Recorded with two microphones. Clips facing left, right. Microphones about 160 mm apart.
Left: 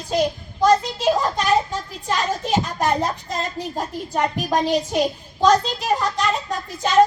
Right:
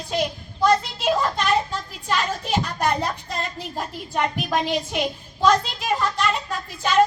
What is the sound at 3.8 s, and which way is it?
A child's voice, 40° left (ahead or behind).